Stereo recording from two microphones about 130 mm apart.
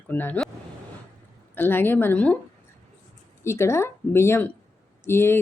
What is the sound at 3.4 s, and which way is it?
Speech, 20° left (ahead or behind).